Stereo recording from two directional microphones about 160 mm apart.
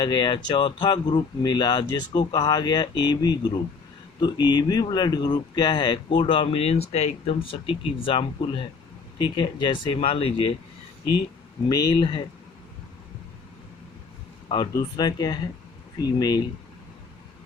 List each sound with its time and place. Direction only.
0.0 s speech: 25° left (ahead or behind)
11.7 s speech: 25° left (ahead or behind)
14.5 s speech: 25° left (ahead or behind)